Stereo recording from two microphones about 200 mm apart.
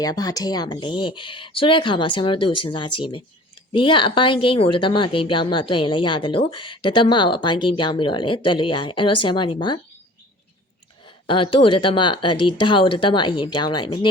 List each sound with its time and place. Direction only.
0.0 s speech: 20° left (ahead or behind)
11.0 s speech: 25° left (ahead or behind)